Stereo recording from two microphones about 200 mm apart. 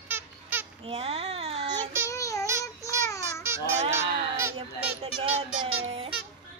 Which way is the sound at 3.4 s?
15° right (ahead or behind).